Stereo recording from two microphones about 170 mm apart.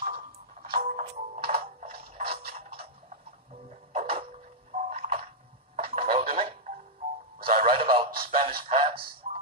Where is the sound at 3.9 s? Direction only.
35° right (ahead or behind).